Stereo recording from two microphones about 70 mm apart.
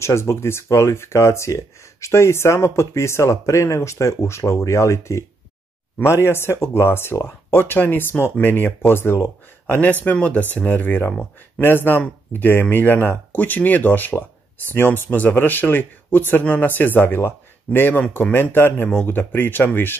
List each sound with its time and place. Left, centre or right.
0.0 s speech: left
10.1 s speech: centre